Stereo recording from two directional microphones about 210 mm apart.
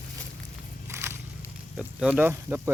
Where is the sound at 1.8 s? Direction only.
5° right (ahead or behind).